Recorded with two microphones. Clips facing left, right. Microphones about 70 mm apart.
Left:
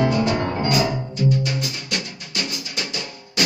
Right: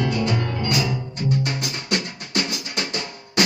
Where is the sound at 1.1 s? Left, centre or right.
Right.